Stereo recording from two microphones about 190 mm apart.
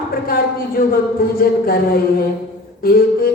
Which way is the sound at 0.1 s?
50° left (ahead or behind).